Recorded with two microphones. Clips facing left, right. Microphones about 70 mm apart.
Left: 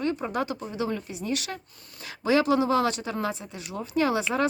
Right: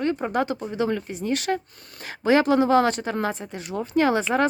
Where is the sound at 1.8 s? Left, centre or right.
Right.